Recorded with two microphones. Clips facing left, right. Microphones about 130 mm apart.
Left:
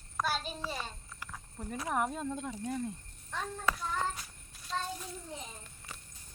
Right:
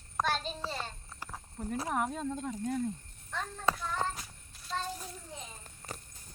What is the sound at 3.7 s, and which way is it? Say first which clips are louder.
Child singing: right 2 dB; 30° right (ahead or behind).